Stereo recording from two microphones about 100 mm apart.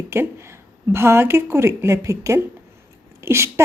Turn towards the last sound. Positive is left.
turn(degrees=-25)  # may be behind; listen again after turning